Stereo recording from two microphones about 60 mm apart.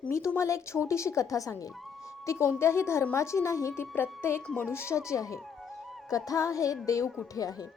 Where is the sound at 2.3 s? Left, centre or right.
Left.